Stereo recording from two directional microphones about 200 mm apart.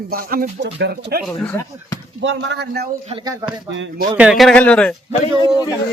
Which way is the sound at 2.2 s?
65° right (ahead or behind).